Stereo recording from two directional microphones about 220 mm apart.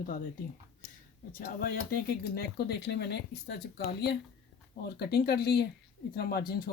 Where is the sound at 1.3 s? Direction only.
40° left (ahead or behind).